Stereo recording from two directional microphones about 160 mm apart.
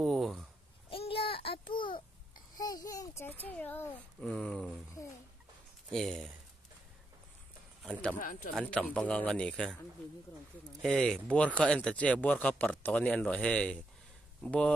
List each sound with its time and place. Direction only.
0.0 s speech: centre (ahead or behind)
0.8 s child singing: 35° left (ahead or behind)
2.5 s speech: 25° left (ahead or behind); by 4.8 s 5° left (ahead or behind)
5.9 s speech: centre (ahead or behind)
7.9 s speech: 5° left (ahead or behind)